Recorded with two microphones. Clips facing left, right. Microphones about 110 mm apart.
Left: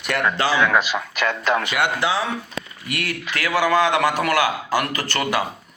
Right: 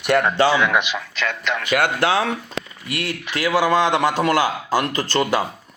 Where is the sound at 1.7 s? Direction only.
55° right (ahead or behind).